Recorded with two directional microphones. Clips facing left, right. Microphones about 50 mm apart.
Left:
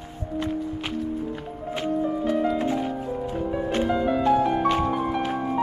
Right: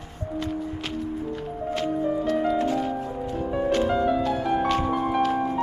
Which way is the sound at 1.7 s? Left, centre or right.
Centre.